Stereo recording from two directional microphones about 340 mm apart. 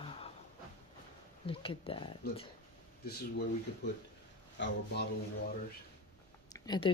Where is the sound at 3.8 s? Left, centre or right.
Left.